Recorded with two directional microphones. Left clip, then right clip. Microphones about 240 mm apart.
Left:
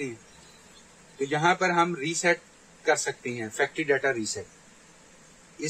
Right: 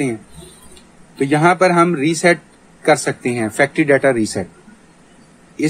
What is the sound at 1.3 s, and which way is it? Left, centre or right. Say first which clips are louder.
Speech: right 11 dB; right.